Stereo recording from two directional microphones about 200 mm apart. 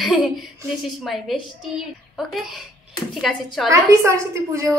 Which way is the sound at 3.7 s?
15° right (ahead or behind).